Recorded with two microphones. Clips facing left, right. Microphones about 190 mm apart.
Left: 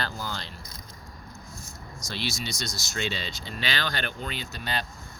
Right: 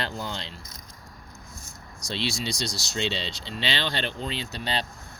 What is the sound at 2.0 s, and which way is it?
Speech, 30° right (ahead or behind).